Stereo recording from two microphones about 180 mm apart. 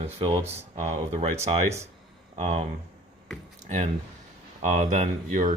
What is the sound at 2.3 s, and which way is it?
Speech, 35° right (ahead or behind).